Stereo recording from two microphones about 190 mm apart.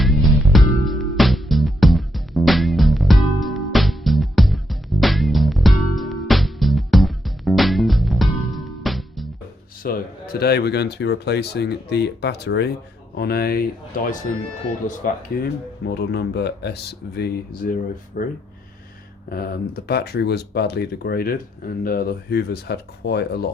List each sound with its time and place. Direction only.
0.0 s music: centre (ahead or behind)
9.8 s speech: 55° left (ahead or behind)
15.9 s speech: 60° left (ahead or behind)